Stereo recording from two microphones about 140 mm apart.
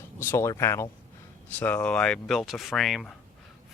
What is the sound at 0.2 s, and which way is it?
Speech, 20° left (ahead or behind).